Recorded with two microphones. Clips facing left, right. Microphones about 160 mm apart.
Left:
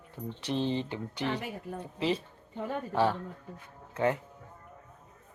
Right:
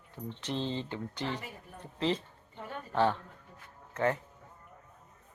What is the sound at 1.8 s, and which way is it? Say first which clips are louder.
Speech: even; 10° left (ahead or behind).